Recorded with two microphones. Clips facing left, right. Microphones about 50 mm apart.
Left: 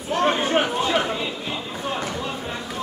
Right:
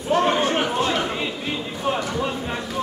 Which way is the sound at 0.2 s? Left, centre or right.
Centre.